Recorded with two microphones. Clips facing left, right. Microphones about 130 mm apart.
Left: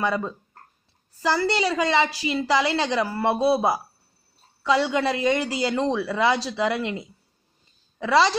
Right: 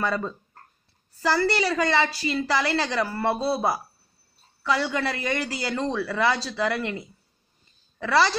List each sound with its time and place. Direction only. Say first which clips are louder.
0.0 s a woman's voice: left 2 dB; 10° left (ahead or behind)